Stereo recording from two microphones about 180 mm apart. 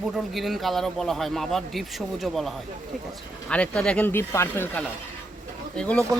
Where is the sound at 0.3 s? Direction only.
Centre (ahead or behind).